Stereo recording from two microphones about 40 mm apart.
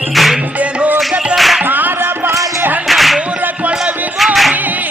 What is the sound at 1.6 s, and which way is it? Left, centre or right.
Music, right.